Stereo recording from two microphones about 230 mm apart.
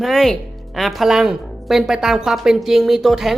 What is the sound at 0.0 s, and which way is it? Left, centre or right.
A woman's voice, centre.